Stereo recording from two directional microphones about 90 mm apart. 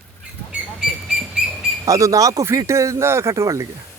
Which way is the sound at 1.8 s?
40° right (ahead or behind).